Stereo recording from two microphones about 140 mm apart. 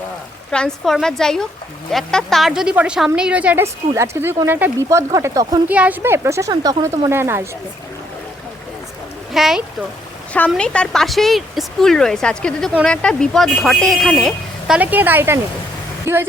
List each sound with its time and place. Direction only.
0.5 s a woman's voice: 5° left (ahead or behind); by 5.6 s 25° right (ahead or behind)
5.6 s speech: 10° right (ahead or behind)
9.3 s a woman's voice: centre (ahead or behind)
10.3 s a woman's voice: 10° left (ahead or behind)
14.8 s speech: 10° right (ahead or behind)